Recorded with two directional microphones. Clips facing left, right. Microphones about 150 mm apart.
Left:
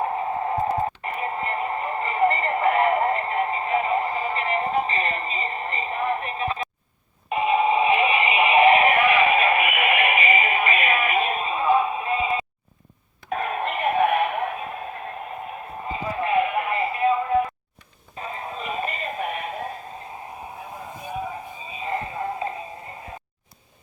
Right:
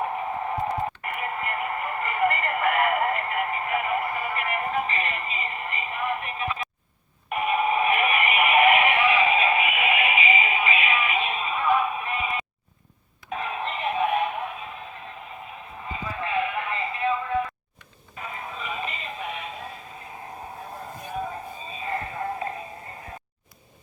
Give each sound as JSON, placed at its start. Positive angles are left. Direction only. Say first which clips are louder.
{"t": 0.0, "sound": "radio", "louder": "left 3 dB", "side_deg": 30}
{"t": 7.3, "sound": "synthetic singing", "louder": "left 4 dB", "side_deg": 25}
{"t": 9.0, "sound": "music", "louder": "left 3 dB", "side_deg": 60}
{"t": 11.5, "sound": "music", "louder": "left 2 dB", "side_deg": 30}
{"t": 13.3, "sound": "synthetic singing", "louder": "left 4 dB", "side_deg": 50}
{"t": 15.9, "sound": "music", "louder": "left 6 dB", "side_deg": 30}
{"t": 18.2, "sound": "synthetic singing", "louder": "left 3 dB", "side_deg": 35}
{"t": 21.7, "sound": "a sound", "louder": "left 3 dB", "side_deg": 20}